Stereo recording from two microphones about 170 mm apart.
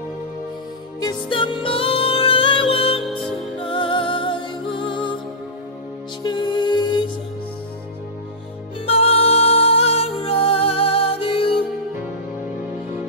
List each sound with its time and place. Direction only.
1.0 s music: 30° left (ahead or behind)
6.2 s music: 25° left (ahead or behind)
8.8 s music: 35° left (ahead or behind)